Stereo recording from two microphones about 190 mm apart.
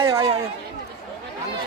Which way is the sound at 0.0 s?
15° right (ahead or behind).